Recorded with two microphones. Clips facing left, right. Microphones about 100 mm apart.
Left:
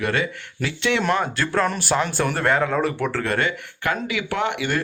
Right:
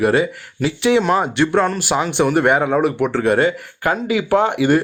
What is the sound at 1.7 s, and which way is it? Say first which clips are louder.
Speech: right 4 dB; 5° right (ahead or behind).